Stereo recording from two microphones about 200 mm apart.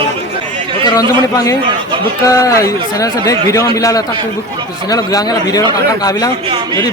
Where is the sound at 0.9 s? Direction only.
15° left (ahead or behind).